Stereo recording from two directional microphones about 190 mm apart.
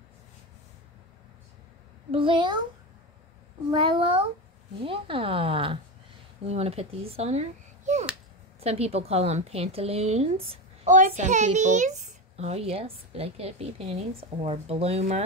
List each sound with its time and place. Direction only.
2.0 s speech: 25° right (ahead or behind)
3.7 s a child's voice: 25° right (ahead or behind)